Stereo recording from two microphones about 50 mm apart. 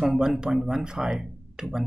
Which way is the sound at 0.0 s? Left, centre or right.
Centre.